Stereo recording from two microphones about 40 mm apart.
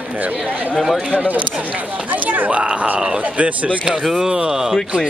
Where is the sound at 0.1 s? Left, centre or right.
Right.